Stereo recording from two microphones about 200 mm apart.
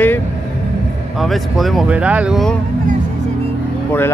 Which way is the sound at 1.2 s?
Centre (ahead or behind).